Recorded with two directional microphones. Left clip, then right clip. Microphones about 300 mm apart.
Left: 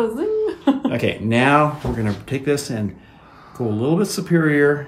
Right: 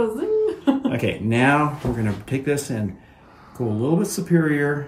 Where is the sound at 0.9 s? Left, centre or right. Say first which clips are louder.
Left 3 dB; centre.